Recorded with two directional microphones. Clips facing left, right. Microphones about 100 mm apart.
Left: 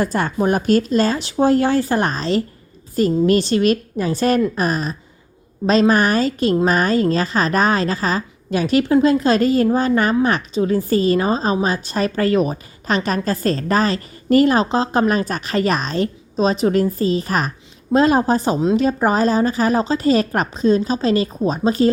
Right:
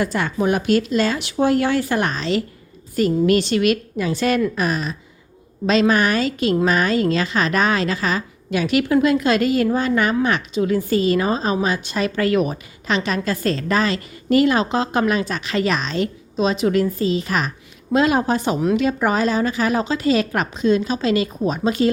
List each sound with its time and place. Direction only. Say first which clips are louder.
0.0 s a woman's voice: left 2 dB; 40° left (ahead or behind)